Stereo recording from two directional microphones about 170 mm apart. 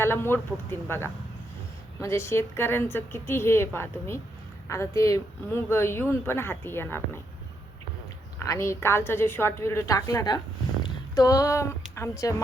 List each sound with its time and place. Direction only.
0.0 s a woman's voice: 15° left (ahead or behind)
8.4 s a woman's voice: 15° left (ahead or behind)
10.8 s a sound: 20° left (ahead or behind)
11.9 s a woman's voice: 15° left (ahead or behind)